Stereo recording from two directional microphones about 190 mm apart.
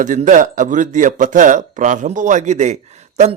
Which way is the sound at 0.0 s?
40° right (ahead or behind).